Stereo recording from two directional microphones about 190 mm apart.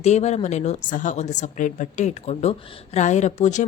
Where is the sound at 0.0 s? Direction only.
35° left (ahead or behind).